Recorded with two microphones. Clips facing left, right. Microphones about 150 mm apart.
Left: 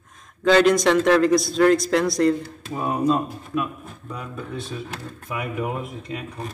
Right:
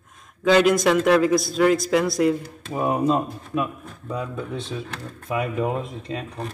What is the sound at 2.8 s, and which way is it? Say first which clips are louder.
Speech: right 1 dB; 20° right (ahead or behind).